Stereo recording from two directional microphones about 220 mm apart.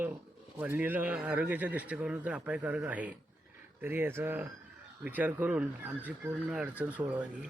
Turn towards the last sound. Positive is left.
turn(degrees=-5)  # may be behind; listen again after turning